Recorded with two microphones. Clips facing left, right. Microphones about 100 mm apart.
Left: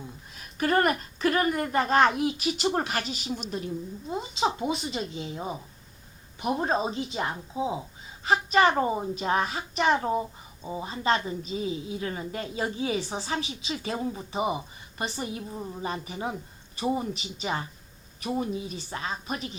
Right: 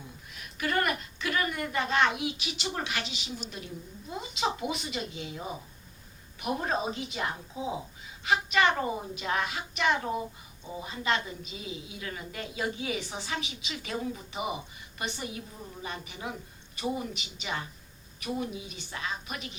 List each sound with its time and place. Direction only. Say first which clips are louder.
0.3 s a woman's voice: left 5 dB; 40° left (ahead or behind)
6.6 s a woman's voice: left 5 dB; 30° left (ahead or behind)